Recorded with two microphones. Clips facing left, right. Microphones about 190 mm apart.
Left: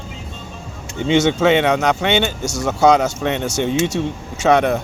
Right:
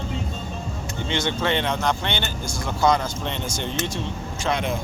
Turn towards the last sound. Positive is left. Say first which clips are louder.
# left 10 dB
turn(degrees=70)  # may be behind; listen again after turning